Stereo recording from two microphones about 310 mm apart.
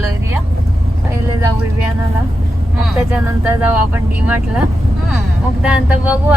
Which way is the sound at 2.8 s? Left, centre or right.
Centre.